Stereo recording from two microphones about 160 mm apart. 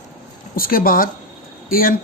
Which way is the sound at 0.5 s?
65° left (ahead or behind).